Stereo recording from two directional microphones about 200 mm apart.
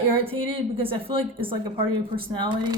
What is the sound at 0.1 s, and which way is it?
Speech, 25° right (ahead or behind).